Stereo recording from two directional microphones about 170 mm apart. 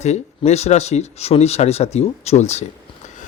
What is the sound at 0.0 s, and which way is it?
Speech, 40° left (ahead or behind).